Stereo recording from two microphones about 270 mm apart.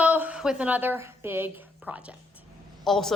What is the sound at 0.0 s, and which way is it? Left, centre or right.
A woman's voice, centre.